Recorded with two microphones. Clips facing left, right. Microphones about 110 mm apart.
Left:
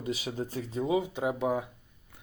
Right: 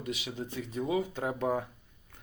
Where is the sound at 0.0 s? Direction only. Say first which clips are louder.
Left 4 dB; 35° left (ahead or behind).